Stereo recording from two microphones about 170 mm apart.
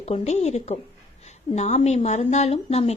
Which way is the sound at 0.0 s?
40° left (ahead or behind).